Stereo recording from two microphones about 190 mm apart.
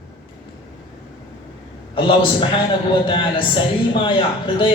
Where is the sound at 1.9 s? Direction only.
25° left (ahead or behind).